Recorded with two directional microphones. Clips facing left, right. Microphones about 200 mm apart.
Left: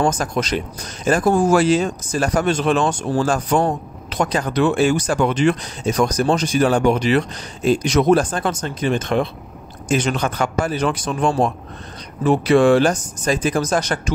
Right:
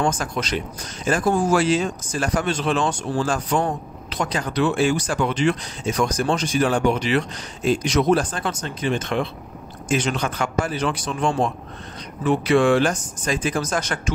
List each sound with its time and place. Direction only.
0.0 s speech: 40° left (ahead or behind)